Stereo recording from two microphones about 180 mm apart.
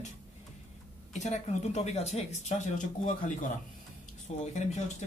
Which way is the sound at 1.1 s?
40° left (ahead or behind).